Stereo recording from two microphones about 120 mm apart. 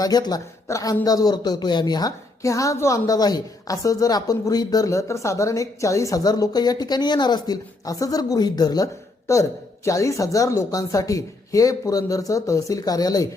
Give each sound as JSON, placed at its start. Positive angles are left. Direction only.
{"t": 0.0, "sound": "a woman's voice", "side_deg": 35}